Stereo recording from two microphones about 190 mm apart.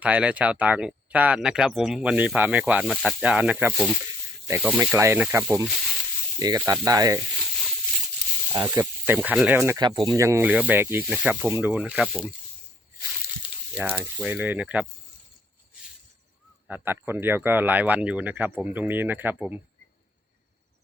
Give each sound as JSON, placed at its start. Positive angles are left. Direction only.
{"t": 0.0, "sound": "speech", "side_deg": -5}
{"t": 6.4, "sound": "speech", "side_deg": -20}
{"t": 8.5, "sound": "speech", "side_deg": -20}
{"t": 9.2, "sound": "speech", "side_deg": -5}
{"t": 9.7, "sound": "speech", "side_deg": -25}
{"t": 10.2, "sound": "speech", "side_deg": -15}
{"t": 13.7, "sound": "speech", "side_deg": -5}
{"t": 16.6, "sound": "speech", "side_deg": -10}